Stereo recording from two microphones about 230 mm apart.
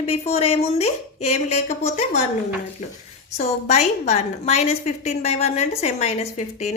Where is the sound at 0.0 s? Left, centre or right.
Left.